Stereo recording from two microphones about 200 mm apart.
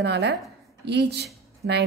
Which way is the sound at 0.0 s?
55° right (ahead or behind).